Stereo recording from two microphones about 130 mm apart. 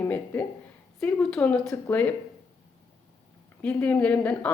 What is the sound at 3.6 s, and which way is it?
Speech, 10° left (ahead or behind).